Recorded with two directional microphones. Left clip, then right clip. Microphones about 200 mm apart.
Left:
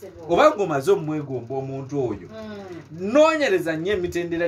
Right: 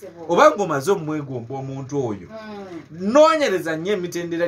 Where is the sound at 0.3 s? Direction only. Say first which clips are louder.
Right 2 dB; 15° right (ahead or behind).